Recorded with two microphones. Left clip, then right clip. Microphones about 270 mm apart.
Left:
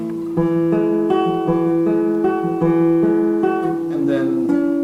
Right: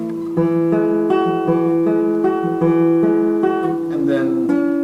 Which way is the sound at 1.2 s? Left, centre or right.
Right.